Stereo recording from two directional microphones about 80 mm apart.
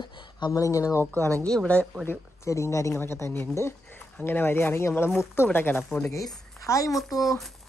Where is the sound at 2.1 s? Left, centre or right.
Left.